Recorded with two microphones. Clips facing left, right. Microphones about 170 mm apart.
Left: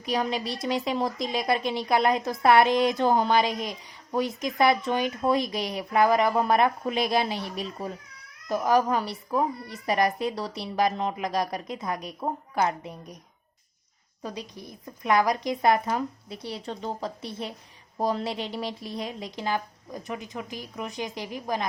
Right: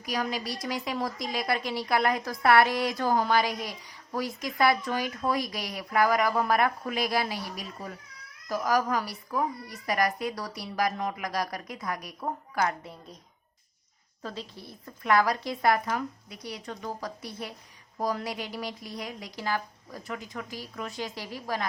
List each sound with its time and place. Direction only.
0.0 s speech: 25° left (ahead or behind)
14.2 s speech: 15° left (ahead or behind)